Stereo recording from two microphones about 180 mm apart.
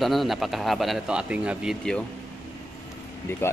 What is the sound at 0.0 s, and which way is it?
Speech, centre (ahead or behind).